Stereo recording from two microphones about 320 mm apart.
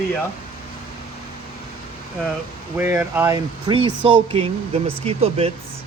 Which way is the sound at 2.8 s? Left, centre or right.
Centre.